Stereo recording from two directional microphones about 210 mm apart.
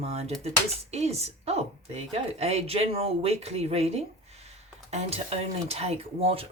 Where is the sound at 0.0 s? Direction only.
30° right (ahead or behind).